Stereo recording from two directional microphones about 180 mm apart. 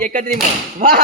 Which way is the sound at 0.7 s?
45° right (ahead or behind).